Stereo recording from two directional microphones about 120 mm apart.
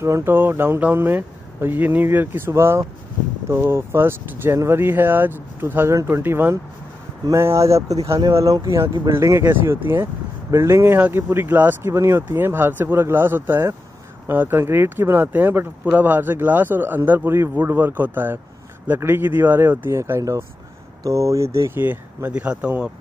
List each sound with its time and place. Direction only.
0.0 s speech: 20° right (ahead or behind)